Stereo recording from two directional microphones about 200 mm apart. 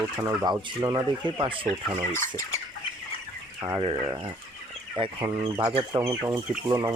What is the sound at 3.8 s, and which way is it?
Speech, 25° right (ahead or behind).